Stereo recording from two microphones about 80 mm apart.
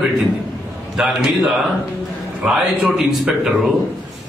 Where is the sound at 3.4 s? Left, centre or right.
Centre.